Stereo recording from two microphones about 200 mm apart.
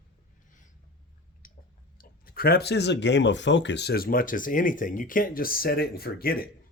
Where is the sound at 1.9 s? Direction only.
50° left (ahead or behind).